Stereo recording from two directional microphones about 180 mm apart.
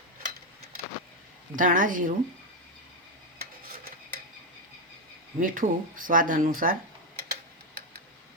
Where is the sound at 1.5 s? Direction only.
45° right (ahead or behind).